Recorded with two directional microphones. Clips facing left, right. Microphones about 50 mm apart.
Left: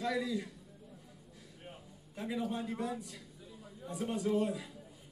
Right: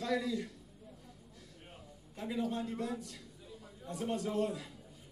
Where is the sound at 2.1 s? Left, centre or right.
Left.